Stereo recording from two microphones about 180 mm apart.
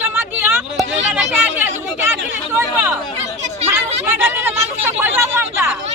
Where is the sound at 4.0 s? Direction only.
10° right (ahead or behind).